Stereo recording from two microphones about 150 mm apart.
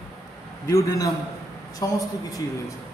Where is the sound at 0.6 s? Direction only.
20° left (ahead or behind).